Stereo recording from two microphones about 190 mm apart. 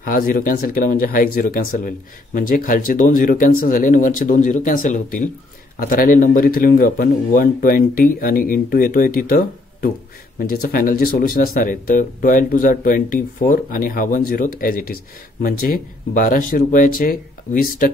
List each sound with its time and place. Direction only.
0.0 s speech: 45° left (ahead or behind)